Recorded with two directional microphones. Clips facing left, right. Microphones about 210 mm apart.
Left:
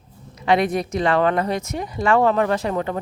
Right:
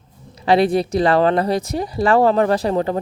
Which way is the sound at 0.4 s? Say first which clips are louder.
Right 4 dB; 30° right (ahead or behind).